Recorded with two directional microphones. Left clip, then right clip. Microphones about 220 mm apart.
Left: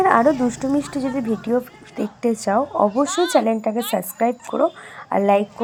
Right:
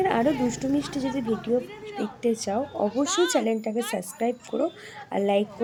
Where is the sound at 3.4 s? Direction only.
5° left (ahead or behind).